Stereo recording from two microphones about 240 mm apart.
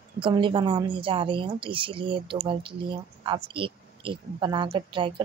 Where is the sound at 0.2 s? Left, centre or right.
Centre.